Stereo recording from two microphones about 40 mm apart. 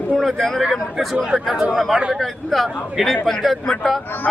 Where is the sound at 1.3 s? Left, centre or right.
Centre.